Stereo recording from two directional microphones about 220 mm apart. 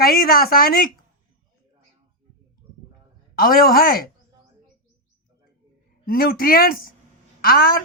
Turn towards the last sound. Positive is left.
turn(degrees=40)  # may be behind; listen again after turning